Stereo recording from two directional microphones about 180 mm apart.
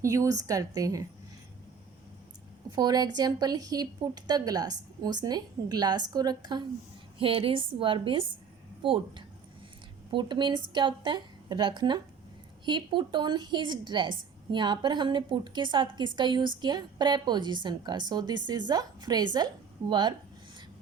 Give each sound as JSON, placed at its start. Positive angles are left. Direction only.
{"t": 0.0, "sound": "a woman's voice", "side_deg": -15}
{"t": 2.7, "sound": "a woman's voice", "side_deg": -20}